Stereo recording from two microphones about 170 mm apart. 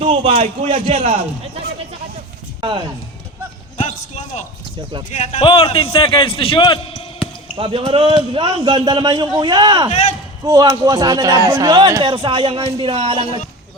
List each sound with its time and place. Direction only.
0.0 s a man's voice: 35° right (ahead or behind)
2.6 s speech: 30° right (ahead or behind)
3.8 s a man's voice: 45° left (ahead or behind)
5.4 s a man's voice: 30° left (ahead or behind)
7.5 s a man's voice: 30° right (ahead or behind)
9.9 s speech: 45° left (ahead or behind)
10.4 s a man's voice: 25° right (ahead or behind)